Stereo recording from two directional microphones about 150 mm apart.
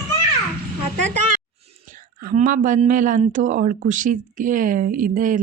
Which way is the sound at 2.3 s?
65° right (ahead or behind).